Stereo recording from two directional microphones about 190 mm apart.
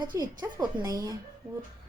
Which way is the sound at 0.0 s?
25° right (ahead or behind).